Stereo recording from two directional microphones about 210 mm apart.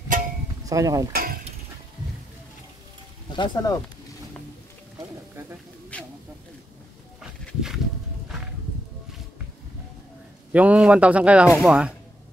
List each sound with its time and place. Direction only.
0.7 s speech: 15° right (ahead or behind)
1.1 s a sound: 45° right (ahead or behind)
3.3 s speech: 20° left (ahead or behind)
5.9 s snake: 5° left (ahead or behind)
7.2 s a sound: centre (ahead or behind)
10.5 s speech: 5° right (ahead or behind)